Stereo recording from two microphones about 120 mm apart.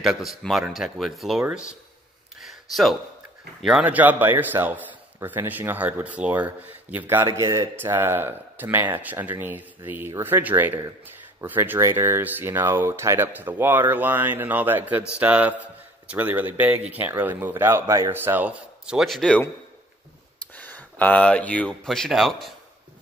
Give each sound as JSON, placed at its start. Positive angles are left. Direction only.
{"t": 0.0, "sound": "speech", "side_deg": 0}
{"t": 2.4, "sound": "a sound", "side_deg": 0}
{"t": 3.6, "sound": "speech", "side_deg": -10}
{"t": 7.2, "sound": "speech", "side_deg": -30}